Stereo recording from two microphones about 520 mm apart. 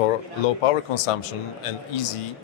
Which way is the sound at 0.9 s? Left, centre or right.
Left.